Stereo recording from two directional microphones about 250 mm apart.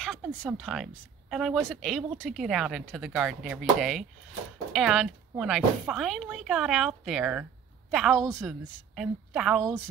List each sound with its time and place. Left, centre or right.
0.0 s speech: centre